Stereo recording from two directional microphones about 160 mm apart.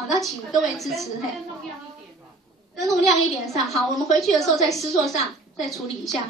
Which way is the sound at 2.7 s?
Centre (ahead or behind).